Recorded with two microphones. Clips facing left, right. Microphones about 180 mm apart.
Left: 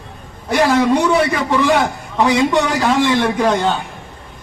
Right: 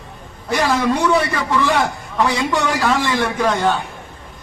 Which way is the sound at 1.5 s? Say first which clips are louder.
Left 3 dB; 15° left (ahead or behind).